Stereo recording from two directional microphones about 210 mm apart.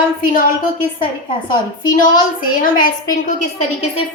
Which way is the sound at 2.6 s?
40° left (ahead or behind).